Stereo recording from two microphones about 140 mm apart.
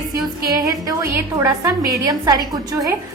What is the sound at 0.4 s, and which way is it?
A woman's voice, 25° right (ahead or behind).